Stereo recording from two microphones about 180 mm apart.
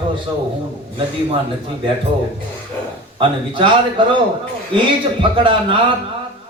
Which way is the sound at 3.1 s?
30° right (ahead or behind).